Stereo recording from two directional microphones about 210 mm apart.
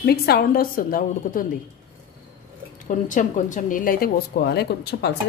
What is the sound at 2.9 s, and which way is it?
Speech, 35° left (ahead or behind).